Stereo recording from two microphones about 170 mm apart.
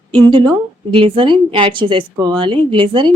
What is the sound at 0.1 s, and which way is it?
A woman's voice, 30° right (ahead or behind).